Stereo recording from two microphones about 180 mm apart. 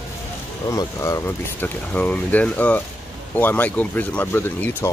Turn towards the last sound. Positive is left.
turn(degrees=10)  # may be behind; listen again after turning